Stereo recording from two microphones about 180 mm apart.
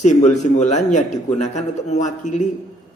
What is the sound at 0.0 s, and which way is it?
A man's voice, 40° left (ahead or behind).